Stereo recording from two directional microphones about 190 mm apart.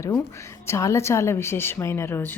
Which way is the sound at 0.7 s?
15° left (ahead or behind).